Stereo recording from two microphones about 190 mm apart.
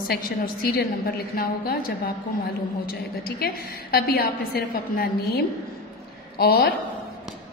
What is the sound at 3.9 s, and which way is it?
A woman's voice, 55° left (ahead or behind).